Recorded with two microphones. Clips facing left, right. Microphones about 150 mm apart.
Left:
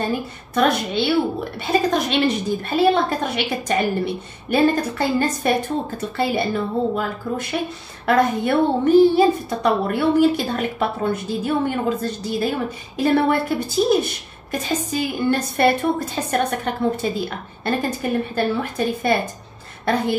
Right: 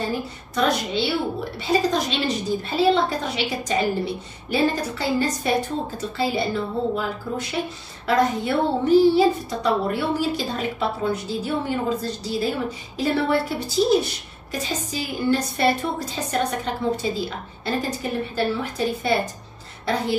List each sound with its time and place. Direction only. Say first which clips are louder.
0.6 s a woman's voice: left 3 dB; 60° left (ahead or behind)